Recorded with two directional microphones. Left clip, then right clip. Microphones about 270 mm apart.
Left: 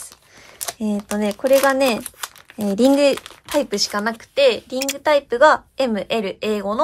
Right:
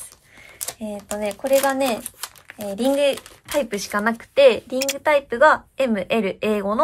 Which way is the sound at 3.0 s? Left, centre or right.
Centre.